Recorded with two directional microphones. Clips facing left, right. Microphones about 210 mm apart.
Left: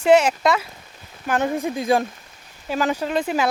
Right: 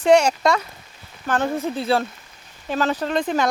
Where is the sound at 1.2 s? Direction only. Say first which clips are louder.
Even; 15° left (ahead or behind).